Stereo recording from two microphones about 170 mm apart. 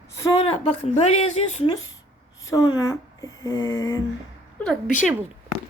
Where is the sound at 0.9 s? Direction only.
40° left (ahead or behind).